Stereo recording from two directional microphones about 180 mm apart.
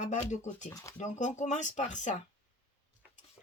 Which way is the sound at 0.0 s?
40° left (ahead or behind).